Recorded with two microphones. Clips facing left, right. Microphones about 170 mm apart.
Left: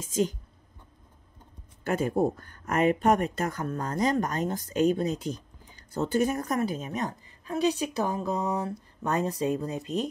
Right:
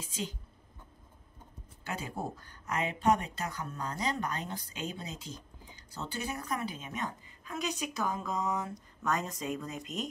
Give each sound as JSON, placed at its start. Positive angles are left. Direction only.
{"t": 0.0, "sound": "speech", "side_deg": 45}
{"t": 1.9, "sound": "speech", "side_deg": 50}